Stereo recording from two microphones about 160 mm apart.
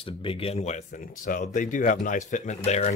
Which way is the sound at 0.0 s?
35° left (ahead or behind).